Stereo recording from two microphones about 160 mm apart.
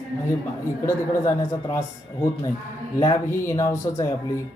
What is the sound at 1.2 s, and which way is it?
Speech, 20° left (ahead or behind).